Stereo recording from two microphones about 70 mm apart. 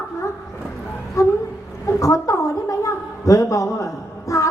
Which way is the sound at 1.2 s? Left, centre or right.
Left.